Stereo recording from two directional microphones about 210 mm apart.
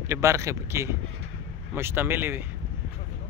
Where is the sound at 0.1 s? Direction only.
15° right (ahead or behind).